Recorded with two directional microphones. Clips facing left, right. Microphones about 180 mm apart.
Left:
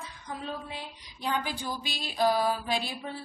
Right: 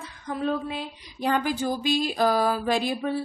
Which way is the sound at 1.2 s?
45° right (ahead or behind).